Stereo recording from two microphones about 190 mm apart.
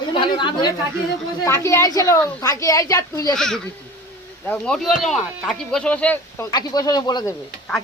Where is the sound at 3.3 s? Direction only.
5° left (ahead or behind); by 7.3 s 20° left (ahead or behind).